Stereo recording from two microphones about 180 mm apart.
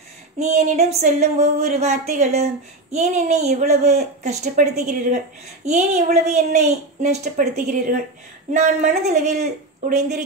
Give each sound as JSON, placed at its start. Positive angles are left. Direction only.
{"t": 0.4, "sound": "speech", "side_deg": -40}